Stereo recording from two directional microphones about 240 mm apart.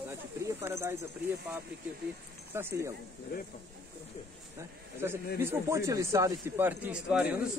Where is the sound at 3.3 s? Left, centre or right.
Left.